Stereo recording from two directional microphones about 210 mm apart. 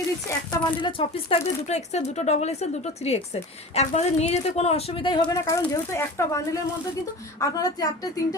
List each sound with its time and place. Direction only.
0.5 s a woman's voice: 20° left (ahead or behind)